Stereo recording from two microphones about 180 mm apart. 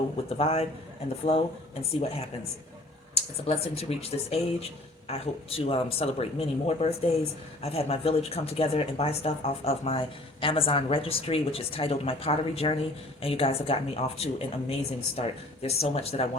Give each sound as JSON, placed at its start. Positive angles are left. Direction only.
{"t": 0.3, "sound": "speech", "side_deg": 35}
{"t": 2.0, "sound": "speech", "side_deg": 35}